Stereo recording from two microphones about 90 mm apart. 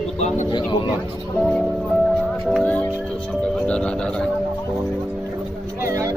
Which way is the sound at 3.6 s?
10° left (ahead or behind).